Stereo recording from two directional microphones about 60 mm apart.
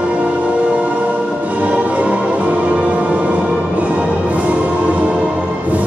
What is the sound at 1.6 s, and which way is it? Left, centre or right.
Music, right.